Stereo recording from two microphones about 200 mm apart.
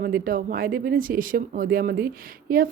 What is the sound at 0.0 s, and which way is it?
A woman's voice, 45° right (ahead or behind).